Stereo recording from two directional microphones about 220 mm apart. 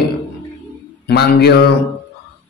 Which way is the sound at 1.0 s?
45° left (ahead or behind).